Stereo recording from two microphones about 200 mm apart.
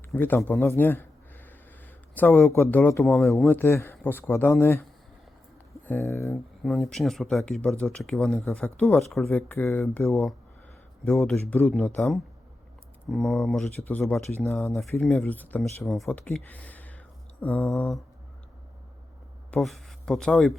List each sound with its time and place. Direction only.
0.1 s a sound: 10° left (ahead or behind)
2.6 s speech: 10° left (ahead or behind)
3.4 s speech: 10° left (ahead or behind)
6.3 s speech: centre (ahead or behind)
19.5 s speech: centre (ahead or behind)